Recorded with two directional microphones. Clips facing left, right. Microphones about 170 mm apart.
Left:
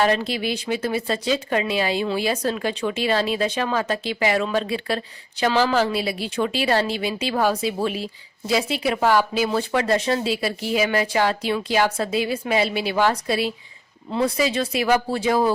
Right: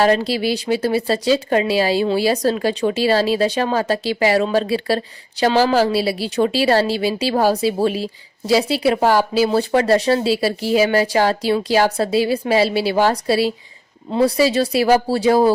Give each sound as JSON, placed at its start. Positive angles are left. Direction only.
{"t": 0.0, "sound": "a woman's voice", "side_deg": -35}